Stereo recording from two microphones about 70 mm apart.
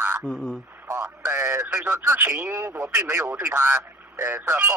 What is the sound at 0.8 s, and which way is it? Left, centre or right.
A man's voice, right.